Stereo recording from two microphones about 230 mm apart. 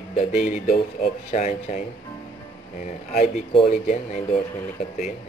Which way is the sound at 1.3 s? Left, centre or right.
Left.